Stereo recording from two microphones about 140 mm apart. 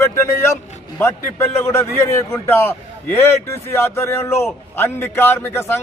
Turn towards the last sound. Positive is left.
turn(degrees=20)  # may be behind; listen again after turning